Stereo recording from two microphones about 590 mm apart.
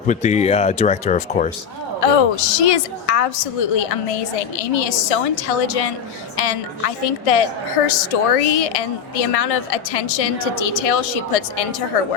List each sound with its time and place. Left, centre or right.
0.1 s speech: centre
2.0 s a woman's voice: left